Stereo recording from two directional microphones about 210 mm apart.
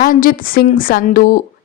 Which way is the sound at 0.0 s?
40° left (ahead or behind).